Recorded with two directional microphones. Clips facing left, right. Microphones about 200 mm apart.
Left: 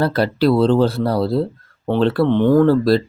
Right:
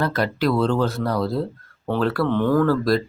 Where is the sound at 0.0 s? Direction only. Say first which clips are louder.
Left 5 dB; 30° left (ahead or behind).